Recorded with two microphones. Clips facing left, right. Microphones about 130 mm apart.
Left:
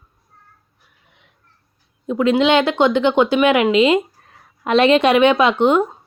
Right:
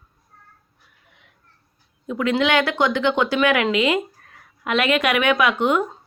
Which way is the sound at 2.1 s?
25° left (ahead or behind).